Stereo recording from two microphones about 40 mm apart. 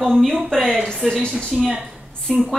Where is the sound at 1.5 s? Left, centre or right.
Centre.